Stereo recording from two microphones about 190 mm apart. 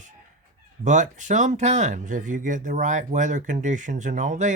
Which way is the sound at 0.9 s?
40° right (ahead or behind).